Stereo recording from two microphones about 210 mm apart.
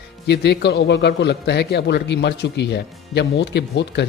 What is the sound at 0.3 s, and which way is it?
A man's voice, 55° left (ahead or behind).